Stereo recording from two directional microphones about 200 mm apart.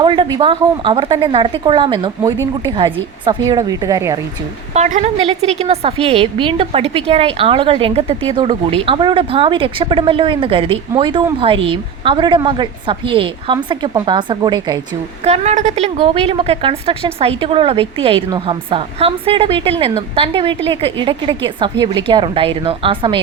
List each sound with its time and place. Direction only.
0.0 s a woman's voice: 25° right (ahead or behind)
4.7 s a woman's voice: 35° right (ahead or behind)
15.2 s a woman's voice: 35° right (ahead or behind)